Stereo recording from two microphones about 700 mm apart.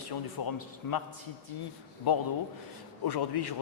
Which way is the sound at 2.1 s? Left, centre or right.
Left.